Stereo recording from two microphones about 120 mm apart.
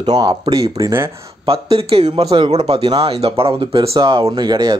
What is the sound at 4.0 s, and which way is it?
Speech, 40° right (ahead or behind).